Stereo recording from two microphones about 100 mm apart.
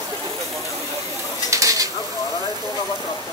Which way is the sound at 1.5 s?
35° right (ahead or behind).